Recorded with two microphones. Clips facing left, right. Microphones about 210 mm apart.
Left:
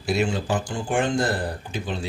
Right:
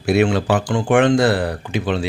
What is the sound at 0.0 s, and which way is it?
Speech, 65° right (ahead or behind).